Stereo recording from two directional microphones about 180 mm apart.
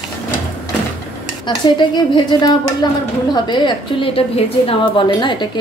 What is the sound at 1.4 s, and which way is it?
Stir, 25° left (ahead or behind).